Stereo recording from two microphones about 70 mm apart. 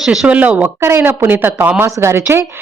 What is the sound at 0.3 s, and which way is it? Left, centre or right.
Speech, centre.